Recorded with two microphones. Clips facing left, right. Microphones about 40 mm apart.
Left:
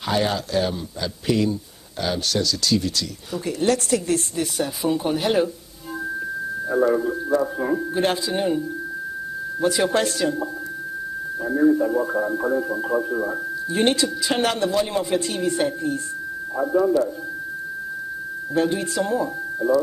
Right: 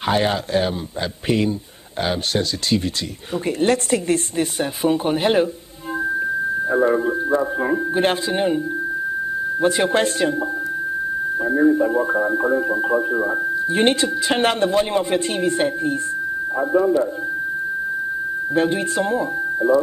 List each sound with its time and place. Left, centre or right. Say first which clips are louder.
0.0 s speech: right 3 dB; right
6.1 s a sound: right 7 dB; right
9.6 s speech: right 2 dB; right
11.3 s a man's voice: right 1 dB; right
18.5 s a man's voice: right 2 dB; right